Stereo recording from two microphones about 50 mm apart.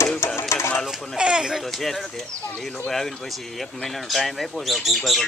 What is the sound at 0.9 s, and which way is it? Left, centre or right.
Speech, centre.